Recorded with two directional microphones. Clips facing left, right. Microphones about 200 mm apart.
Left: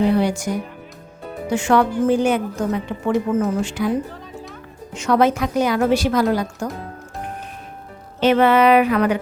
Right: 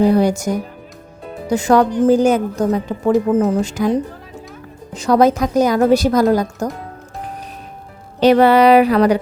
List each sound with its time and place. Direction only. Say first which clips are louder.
0.0 s a woman's voice: right 4 dB; 40° right (ahead or behind)
4.9 s a woman's voice: right 4 dB; 35° right (ahead or behind)
8.2 s a woman's voice: right 4 dB; 35° right (ahead or behind)